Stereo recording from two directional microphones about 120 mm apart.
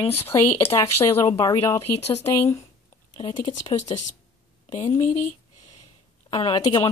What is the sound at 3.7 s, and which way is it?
Speech, 60° left (ahead or behind).